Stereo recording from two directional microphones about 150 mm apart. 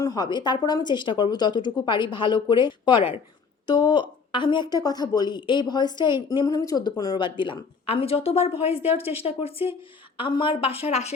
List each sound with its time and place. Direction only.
0.0 s a woman's voice: 25° left (ahead or behind); by 11.1 s 45° left (ahead or behind)